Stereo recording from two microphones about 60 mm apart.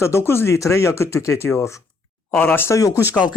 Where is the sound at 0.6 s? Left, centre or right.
Left.